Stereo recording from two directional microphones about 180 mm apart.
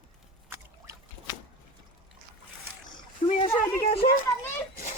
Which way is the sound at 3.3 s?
35° left (ahead or behind).